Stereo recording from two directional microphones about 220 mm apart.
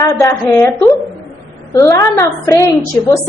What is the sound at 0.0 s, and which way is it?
A woman's voice, 15° left (ahead or behind).